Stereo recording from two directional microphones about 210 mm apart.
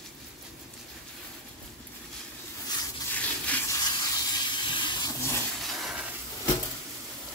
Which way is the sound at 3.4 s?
10° left (ahead or behind).